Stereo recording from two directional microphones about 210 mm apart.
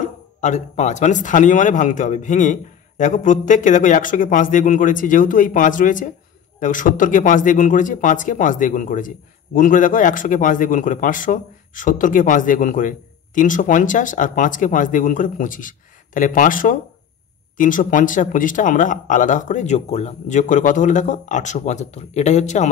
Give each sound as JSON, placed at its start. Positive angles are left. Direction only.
{"t": 0.0, "sound": "a man's voice", "side_deg": 35}